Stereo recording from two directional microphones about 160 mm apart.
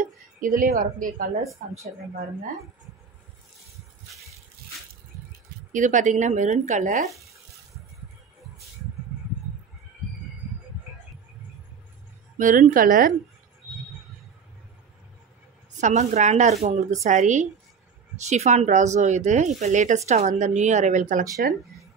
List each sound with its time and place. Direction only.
0.0 s a woman's voice: 55° right (ahead or behind)
5.7 s speech: 50° right (ahead or behind)
12.4 s speech: 55° right (ahead or behind)
15.8 s speech: 45° right (ahead or behind)